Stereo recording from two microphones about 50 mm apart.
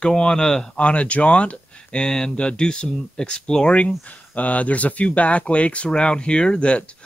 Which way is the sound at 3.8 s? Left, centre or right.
Left.